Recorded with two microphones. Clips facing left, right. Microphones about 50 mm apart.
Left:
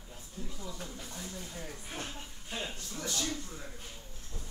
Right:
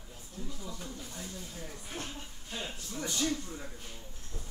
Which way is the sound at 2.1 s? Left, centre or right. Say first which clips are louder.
Left 1 dB; centre.